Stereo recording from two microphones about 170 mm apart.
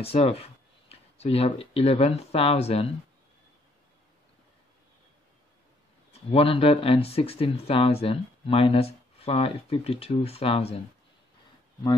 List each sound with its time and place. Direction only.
0.0 s speech: 35° left (ahead or behind)
6.3 s speech: 35° left (ahead or behind)